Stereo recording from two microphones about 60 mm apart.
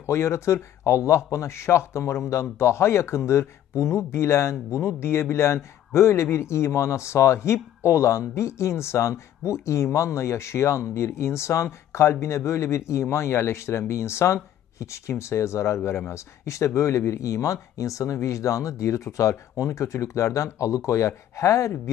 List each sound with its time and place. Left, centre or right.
0.0 s speech: left